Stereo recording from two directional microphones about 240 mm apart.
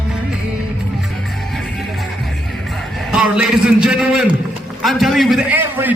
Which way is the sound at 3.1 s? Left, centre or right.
Centre.